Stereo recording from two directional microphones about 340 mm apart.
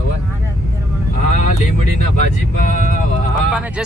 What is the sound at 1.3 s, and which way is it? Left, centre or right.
Vehicle, left.